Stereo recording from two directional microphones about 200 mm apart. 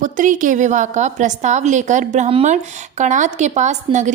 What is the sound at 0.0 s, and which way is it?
A woman's voice, 40° right (ahead or behind).